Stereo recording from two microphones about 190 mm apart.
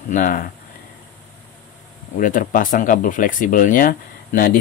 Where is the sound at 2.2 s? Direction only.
45° left (ahead or behind).